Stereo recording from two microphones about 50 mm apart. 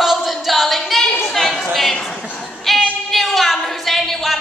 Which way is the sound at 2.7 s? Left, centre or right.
Centre.